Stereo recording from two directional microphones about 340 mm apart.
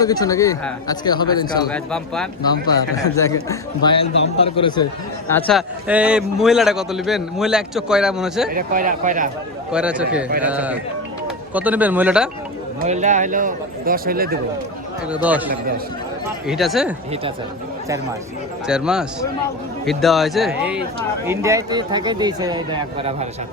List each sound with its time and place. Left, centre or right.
0.0 s speech: centre
5.3 s a man's voice: centre
8.4 s speech: right
9.7 s a man's voice: centre
12.8 s speech: right
15.1 s a man's voice: centre
16.5 s a man's voice: centre
18.7 s a man's voice: centre